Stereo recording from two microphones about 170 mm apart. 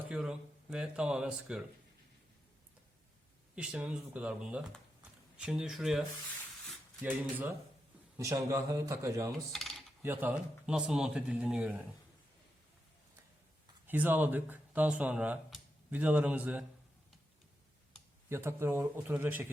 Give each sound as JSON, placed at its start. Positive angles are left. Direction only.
{"t": 0.1, "sound": "speech", "side_deg": -5}
{"t": 3.5, "sound": "speech", "side_deg": -5}
{"t": 7.0, "sound": "a man's voice", "side_deg": -10}
{"t": 9.5, "sound": "coin", "side_deg": 0}
{"t": 10.0, "sound": "speech", "side_deg": -10}
{"t": 13.8, "sound": "speech", "side_deg": -10}
{"t": 18.3, "sound": "speech", "side_deg": -15}